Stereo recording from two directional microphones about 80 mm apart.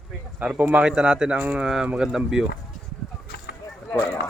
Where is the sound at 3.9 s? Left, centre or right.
Centre.